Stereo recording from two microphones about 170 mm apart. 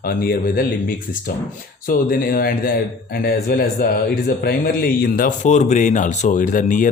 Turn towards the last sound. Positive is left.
turn(degrees=50)  # may be behind; listen again after turning